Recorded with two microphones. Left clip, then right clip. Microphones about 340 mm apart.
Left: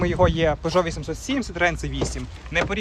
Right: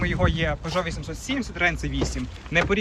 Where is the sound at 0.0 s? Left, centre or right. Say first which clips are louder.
Left 5 dB; centre.